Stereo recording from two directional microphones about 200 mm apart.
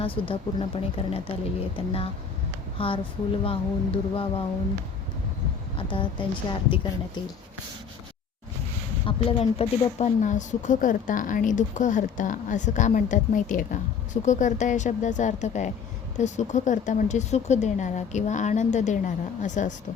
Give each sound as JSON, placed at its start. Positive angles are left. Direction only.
{"t": 0.0, "sound": "a woman's voice", "side_deg": 25}
{"t": 5.7, "sound": "a woman's voice", "side_deg": 25}
{"t": 9.0, "sound": "speech", "side_deg": 30}